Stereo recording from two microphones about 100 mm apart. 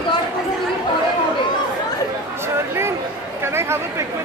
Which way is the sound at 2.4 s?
25° right (ahead or behind).